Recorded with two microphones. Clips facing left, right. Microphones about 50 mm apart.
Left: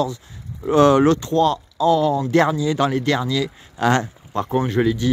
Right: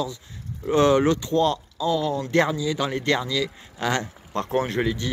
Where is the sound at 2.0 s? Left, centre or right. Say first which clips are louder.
Left 5 dB; centre.